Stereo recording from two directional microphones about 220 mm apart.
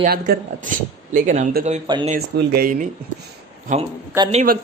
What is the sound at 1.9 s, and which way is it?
Speech, 20° right (ahead or behind).